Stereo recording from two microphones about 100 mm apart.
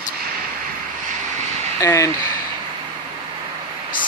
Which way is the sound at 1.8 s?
30° left (ahead or behind).